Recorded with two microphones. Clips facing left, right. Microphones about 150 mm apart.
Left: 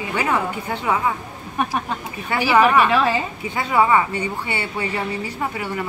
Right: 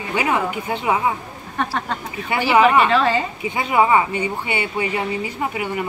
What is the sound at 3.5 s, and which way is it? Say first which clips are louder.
Speech: right 1 dB; 20° right (ahead or behind).